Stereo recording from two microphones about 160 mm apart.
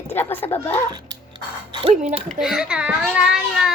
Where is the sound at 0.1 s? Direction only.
15° left (ahead or behind).